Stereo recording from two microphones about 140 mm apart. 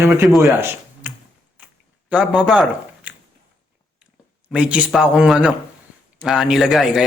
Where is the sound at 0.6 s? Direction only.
15° right (ahead or behind).